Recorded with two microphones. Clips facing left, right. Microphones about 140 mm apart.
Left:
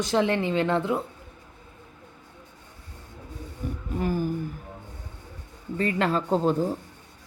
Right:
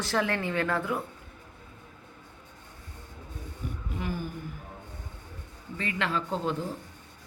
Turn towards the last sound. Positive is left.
turn(degrees=40)  # may be behind; listen again after turning